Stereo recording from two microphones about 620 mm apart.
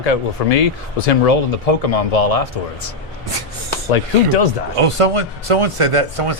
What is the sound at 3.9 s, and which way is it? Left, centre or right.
Speech, left.